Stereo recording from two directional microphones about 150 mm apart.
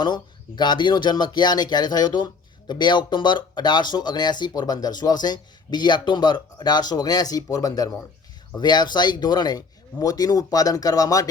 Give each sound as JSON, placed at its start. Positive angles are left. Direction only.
{"t": 0.0, "sound": "speech", "side_deg": 30}